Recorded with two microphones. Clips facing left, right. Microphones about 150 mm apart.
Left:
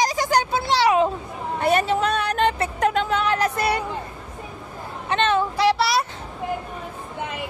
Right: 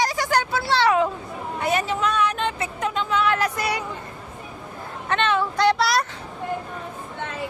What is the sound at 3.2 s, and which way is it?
Music, 40° left (ahead or behind).